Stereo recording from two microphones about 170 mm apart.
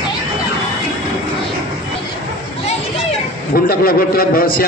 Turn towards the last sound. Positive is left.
turn(degrees=60)  # may be behind; listen again after turning